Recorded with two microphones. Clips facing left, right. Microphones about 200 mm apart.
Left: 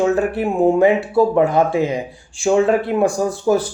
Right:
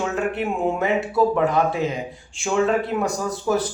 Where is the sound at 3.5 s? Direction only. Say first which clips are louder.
Left 5 dB; 30° left (ahead or behind).